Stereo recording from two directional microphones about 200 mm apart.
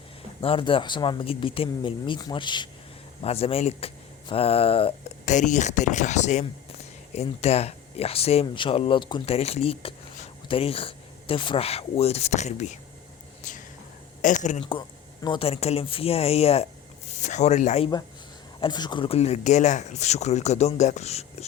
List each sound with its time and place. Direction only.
0.4 s speech: 25° left (ahead or behind)
13.4 s whispering: 40° left (ahead or behind)
14.2 s speech: 40° left (ahead or behind)
18.6 s speech: 20° left (ahead or behind)